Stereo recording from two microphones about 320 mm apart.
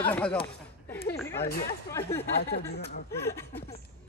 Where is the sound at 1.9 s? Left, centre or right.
Centre.